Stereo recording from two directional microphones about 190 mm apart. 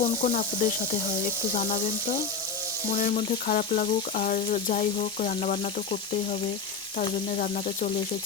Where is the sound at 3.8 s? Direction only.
45° left (ahead or behind).